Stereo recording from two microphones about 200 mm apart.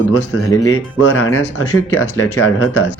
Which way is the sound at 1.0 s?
85° left.